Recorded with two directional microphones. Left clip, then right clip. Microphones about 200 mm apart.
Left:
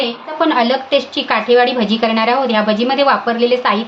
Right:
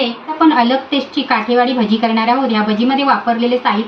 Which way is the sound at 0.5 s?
50° left (ahead or behind).